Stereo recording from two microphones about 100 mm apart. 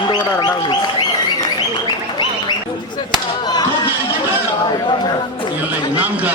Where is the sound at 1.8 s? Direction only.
50° left (ahead or behind).